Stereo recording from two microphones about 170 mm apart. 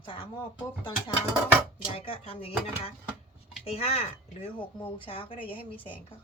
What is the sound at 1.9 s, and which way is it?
Speech, 35° left (ahead or behind).